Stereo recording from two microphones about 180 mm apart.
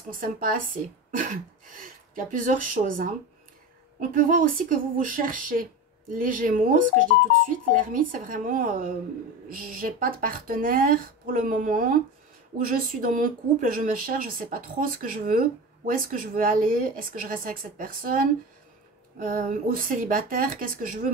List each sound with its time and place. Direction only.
0.2 s speech: 50° right (ahead or behind)